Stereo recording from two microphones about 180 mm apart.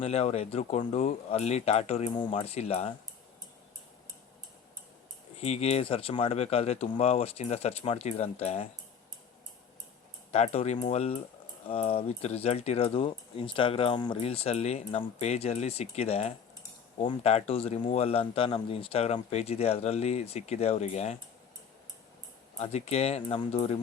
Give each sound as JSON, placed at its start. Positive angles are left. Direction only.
{"t": 0.0, "sound": "speech", "side_deg": 35}
{"t": 5.4, "sound": "speech", "side_deg": 35}
{"t": 10.3, "sound": "speech", "side_deg": 35}
{"t": 22.5, "sound": "speech", "side_deg": 35}